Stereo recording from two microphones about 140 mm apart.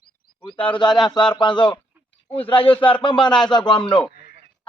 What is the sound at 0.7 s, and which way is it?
Speech, 35° left (ahead or behind).